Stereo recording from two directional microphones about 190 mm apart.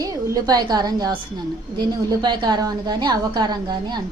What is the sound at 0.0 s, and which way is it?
A woman's voice, 15° right (ahead or behind).